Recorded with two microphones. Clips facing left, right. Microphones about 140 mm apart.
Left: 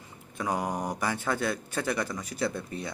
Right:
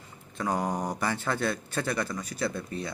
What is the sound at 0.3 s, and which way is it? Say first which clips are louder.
Speech: right 1 dB; 10° left (ahead or behind).